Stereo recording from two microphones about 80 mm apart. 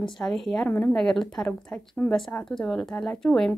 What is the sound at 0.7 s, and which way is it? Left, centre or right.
Speech, left.